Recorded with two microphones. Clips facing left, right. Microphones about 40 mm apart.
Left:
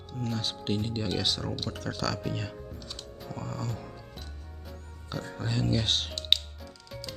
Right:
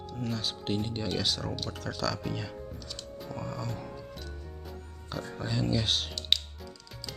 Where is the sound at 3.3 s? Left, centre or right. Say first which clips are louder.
Even; centre.